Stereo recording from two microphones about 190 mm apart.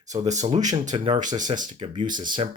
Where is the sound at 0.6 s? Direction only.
20° right (ahead or behind).